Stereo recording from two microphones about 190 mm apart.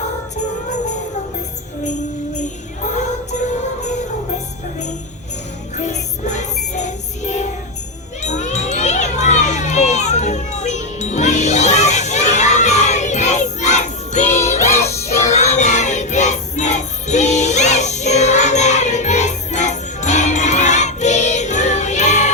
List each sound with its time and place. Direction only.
2.3 s music: 40° left (ahead or behind)
5.7 s music: 40° left (ahead or behind)
8.2 s crowd: 35° left (ahead or behind)
14.4 s music: 35° left (ahead or behind)